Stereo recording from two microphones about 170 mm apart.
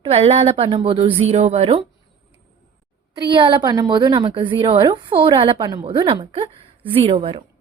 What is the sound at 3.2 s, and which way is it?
A woman's voice, 30° right (ahead or behind).